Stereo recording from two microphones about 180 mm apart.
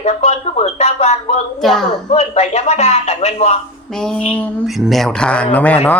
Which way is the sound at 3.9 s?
5° left (ahead or behind).